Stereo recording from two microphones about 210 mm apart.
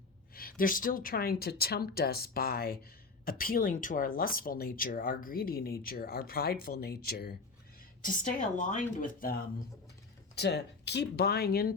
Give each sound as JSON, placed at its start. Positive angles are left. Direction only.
{"t": 0.3, "sound": "speech", "side_deg": 45}
{"t": 8.0, "sound": "speech", "side_deg": 40}